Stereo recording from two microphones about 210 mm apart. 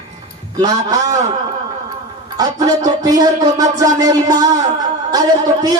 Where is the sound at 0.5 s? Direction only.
20° right (ahead or behind).